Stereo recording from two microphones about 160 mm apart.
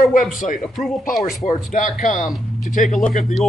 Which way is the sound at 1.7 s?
55° left (ahead or behind).